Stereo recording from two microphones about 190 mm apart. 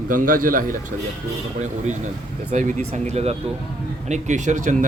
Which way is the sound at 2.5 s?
40° right (ahead or behind).